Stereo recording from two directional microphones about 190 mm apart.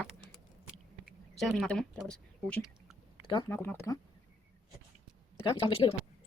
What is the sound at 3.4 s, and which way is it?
Speech, 10° left (ahead or behind).